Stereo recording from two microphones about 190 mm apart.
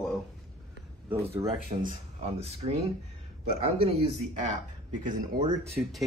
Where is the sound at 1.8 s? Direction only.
35° right (ahead or behind).